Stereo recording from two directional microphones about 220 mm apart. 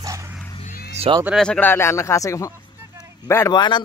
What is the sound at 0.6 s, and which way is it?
Cat, 40° left (ahead or behind).